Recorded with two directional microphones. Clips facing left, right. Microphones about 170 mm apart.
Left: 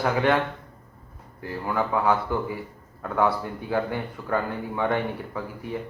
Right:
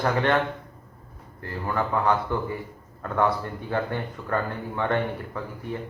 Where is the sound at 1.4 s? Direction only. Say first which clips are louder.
Left 1 dB; 5° left (ahead or behind).